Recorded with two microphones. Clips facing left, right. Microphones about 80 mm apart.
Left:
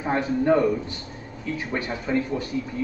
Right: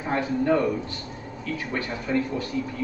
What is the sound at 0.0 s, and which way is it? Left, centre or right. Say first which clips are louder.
A man's voice: left 2 dB; left.